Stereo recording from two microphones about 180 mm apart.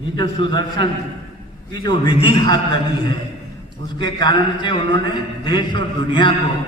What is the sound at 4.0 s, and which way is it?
A man's voice, 25° left (ahead or behind).